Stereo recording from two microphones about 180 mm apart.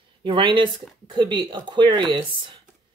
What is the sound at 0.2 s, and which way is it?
A woman's voice, 30° right (ahead or behind).